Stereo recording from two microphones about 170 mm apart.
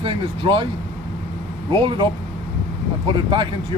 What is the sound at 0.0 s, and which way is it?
Speech, 30° right (ahead or behind).